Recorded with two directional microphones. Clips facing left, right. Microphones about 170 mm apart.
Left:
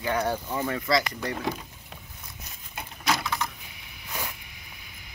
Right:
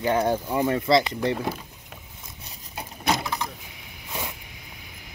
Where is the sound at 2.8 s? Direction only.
30° right (ahead or behind).